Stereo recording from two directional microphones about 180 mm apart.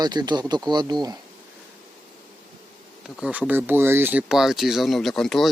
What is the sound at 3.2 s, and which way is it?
Speech, 5° right (ahead or behind).